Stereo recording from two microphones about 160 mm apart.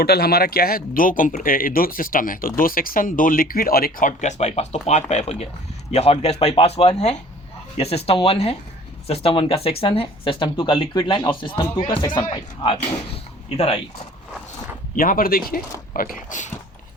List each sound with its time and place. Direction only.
0.0 s speech: 80° left; by 12.8 s 30° left (ahead or behind)
14.9 s speech: 60° left (ahead or behind)